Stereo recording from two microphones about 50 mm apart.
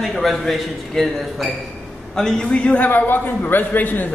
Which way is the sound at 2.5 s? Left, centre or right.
Left.